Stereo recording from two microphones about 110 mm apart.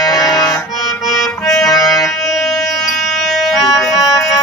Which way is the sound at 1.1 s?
5° left (ahead or behind).